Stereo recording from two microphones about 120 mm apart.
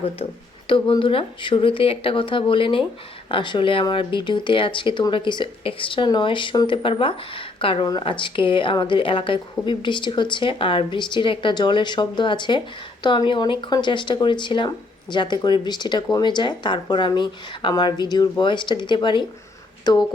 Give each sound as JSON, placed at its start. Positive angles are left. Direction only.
{"t": 0.7, "sound": "a woman's voice", "side_deg": 45}